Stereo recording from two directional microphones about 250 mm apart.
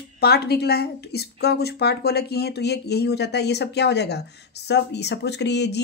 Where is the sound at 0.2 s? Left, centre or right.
Left.